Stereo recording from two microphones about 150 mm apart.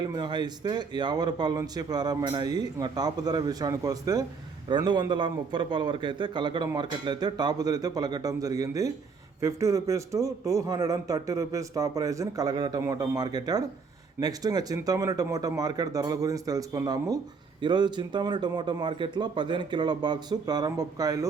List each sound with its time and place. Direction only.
0.0 s a man's voice: 30° right (ahead or behind)